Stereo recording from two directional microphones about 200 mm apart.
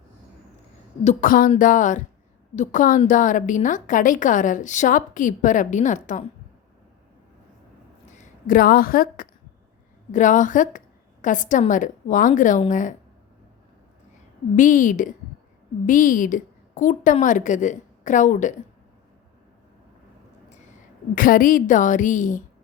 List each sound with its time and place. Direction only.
1.0 s a woman's voice: 40° left (ahead or behind)
8.0 s a sound: 40° left (ahead or behind)
10.1 s a woman's voice: 40° left (ahead or behind)
14.5 s a woman's voice: 40° left (ahead or behind)
21.2 s a woman's voice: 45° left (ahead or behind)